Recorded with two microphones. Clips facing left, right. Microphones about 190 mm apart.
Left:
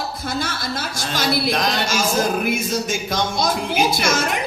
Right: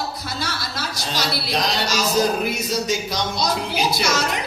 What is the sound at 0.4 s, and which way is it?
A woman's voice, 50° left (ahead or behind).